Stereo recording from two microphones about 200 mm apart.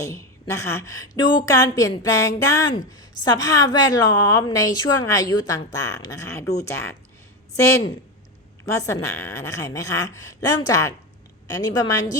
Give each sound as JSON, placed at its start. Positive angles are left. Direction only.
{"t": 0.0, "sound": "a woman's voice", "side_deg": 15}